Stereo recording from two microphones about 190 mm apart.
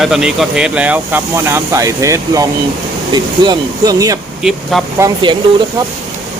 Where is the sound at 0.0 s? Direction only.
Centre (ahead or behind); by 4.2 s 20° right (ahead or behind).